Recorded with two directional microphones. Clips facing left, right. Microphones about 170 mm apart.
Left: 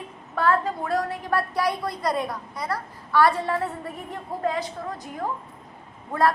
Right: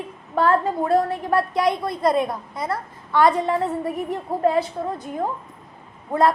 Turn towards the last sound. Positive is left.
turn(degrees=-20)  # may be behind; listen again after turning